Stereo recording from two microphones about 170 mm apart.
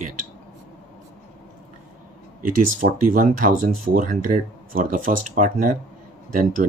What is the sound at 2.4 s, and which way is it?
Speech, 55° right (ahead or behind).